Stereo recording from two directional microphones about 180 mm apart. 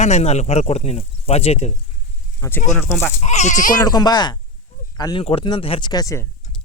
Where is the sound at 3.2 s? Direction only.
40° left (ahead or behind).